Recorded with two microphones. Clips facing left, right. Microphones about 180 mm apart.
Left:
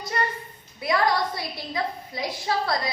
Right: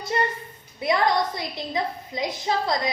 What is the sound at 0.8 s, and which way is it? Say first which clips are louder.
A woman's voice: right 1 dB; 20° right (ahead or behind).